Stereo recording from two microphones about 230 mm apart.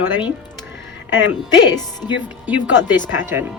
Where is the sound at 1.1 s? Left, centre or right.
Left.